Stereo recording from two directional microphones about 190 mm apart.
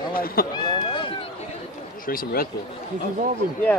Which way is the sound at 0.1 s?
50° left (ahead or behind).